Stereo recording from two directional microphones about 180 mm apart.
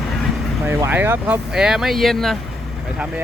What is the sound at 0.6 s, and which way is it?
Vehicle, 10° right (ahead or behind).